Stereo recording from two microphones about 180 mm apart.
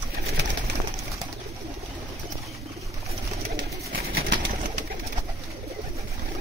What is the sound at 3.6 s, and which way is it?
Bird, 75° right (ahead or behind).